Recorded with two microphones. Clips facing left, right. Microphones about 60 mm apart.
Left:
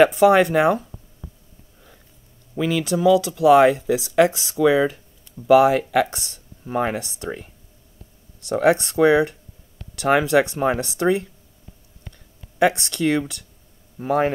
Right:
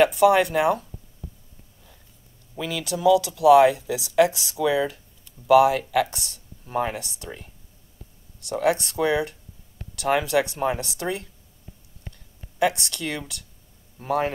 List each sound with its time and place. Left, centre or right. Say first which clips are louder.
0.0 s speech: left 3 dB; left
2.5 s speech: left 7 dB; left
8.4 s speech: left 5 dB; left
12.5 s speech: left 4 dB; left